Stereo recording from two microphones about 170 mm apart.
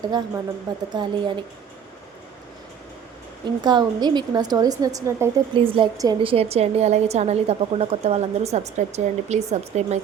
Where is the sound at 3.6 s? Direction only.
25° right (ahead or behind).